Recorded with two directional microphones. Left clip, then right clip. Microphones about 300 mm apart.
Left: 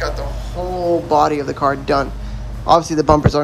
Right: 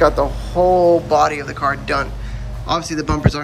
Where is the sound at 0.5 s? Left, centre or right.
Centre.